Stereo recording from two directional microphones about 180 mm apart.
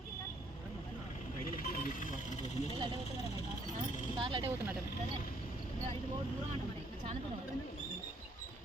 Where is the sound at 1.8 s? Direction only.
50° left (ahead or behind).